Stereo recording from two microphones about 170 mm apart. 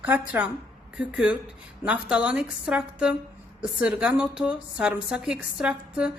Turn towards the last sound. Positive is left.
turn(degrees=-5)  # may be behind; listen again after turning